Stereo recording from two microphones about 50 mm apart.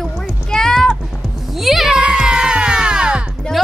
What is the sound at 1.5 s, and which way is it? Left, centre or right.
Music, centre.